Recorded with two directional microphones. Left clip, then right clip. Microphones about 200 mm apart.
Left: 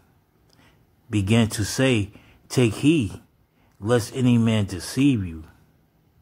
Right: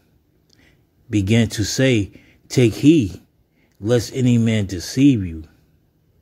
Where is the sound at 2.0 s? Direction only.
15° right (ahead or behind).